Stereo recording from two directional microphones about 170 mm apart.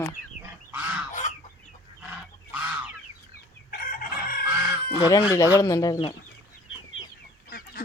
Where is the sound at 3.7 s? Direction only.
55° left (ahead or behind).